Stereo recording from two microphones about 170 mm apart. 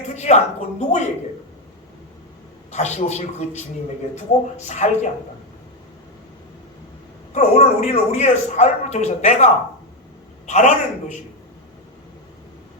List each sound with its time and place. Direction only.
0.1 s speech: 40° left (ahead or behind)
2.7 s speech: 40° left (ahead or behind)
7.3 s speech: 40° left (ahead or behind)